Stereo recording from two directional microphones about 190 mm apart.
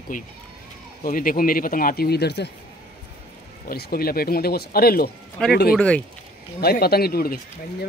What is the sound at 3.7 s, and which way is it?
Speech, 50° left (ahead or behind).